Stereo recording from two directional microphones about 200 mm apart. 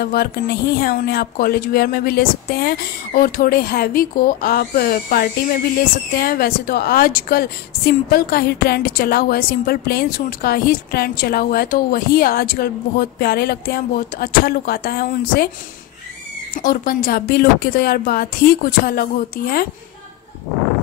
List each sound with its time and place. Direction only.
0.0 s a woman's voice: 50° left (ahead or behind)
16.5 s a woman's voice: 45° left (ahead or behind)